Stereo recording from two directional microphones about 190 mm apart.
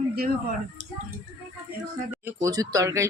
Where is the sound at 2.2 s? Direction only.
15° right (ahead or behind).